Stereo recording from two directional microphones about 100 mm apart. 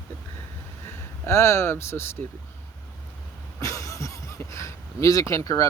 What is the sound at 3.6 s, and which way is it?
Speech, 30° left (ahead or behind).